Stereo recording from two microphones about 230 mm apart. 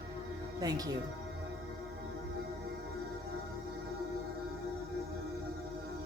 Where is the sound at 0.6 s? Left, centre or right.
Centre.